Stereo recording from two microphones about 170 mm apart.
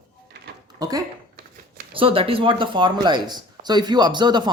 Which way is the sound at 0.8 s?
20° right (ahead or behind).